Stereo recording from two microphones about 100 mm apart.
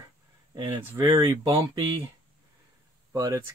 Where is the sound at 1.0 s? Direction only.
30° right (ahead or behind).